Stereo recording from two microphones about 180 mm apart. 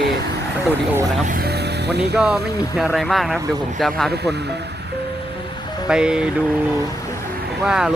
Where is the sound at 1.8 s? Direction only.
65° right (ahead or behind).